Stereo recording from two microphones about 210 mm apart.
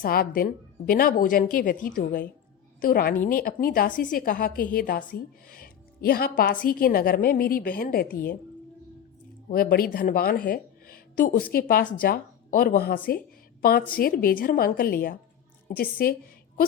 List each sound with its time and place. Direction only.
0.0 s a woman's voice: 45° left (ahead or behind)
9.5 s a woman's voice: 45° left (ahead or behind)
13.1 s a sound: 45° left (ahead or behind)
13.9 s a woman's voice: 45° left (ahead or behind)